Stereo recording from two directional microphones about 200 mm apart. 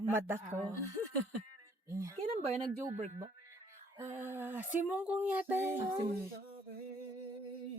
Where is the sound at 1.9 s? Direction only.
15° right (ahead or behind).